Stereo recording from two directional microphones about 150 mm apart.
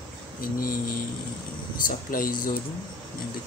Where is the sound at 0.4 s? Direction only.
70° left (ahead or behind).